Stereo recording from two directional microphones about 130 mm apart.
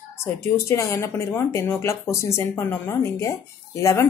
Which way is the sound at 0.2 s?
20° left (ahead or behind).